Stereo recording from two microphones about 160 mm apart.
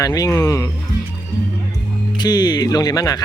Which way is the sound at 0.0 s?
20° left (ahead or behind).